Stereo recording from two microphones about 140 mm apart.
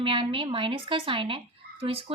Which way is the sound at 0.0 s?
40° right (ahead or behind).